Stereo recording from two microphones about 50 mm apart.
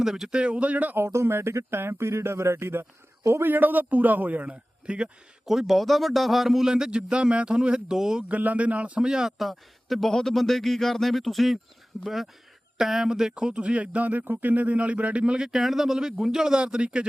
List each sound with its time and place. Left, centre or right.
0.0 s a man's voice: centre
0.3 s speech: right
0.9 s speech: right
3.4 s a man's voice: right
5.5 s a man's voice: centre
8.3 s speech: right
9.0 s a man's voice: centre
9.4 s a man's voice: centre
13.3 s speech: right
15.2 s a man's voice: centre
15.5 s a man's voice: centre